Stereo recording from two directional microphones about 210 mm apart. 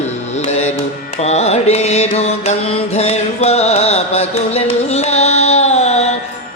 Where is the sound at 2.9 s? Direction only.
30° left (ahead or behind).